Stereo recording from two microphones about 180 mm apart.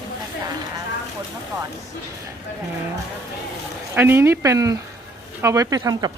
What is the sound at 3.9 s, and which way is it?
Speech, 10° right (ahead or behind).